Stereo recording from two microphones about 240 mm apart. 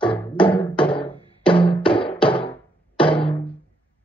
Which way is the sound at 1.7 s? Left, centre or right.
Left.